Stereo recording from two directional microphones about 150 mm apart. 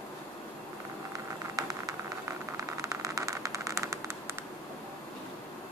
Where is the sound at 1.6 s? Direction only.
25° right (ahead or behind).